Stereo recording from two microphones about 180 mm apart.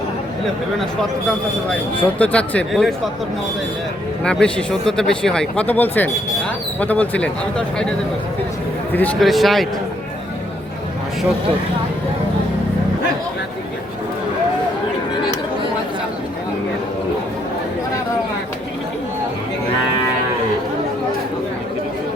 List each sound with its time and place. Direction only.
2.1 s speech: 10° left (ahead or behind)
4.2 s speech: 5° left (ahead or behind)
8.9 s speech: 10° left (ahead or behind)